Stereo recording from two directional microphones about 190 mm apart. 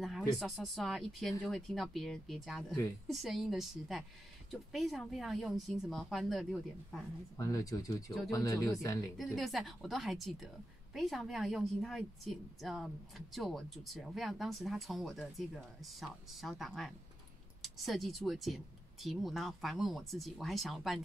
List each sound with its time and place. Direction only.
0.4 s a woman's voice: centre (ahead or behind)
7.3 s speech: 15° left (ahead or behind)
9.1 s a woman's voice: centre (ahead or behind)